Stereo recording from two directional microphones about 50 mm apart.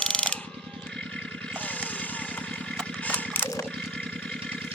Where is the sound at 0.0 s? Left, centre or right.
Centre.